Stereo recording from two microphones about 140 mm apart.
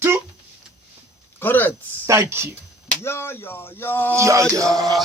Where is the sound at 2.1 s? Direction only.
20° right (ahead or behind).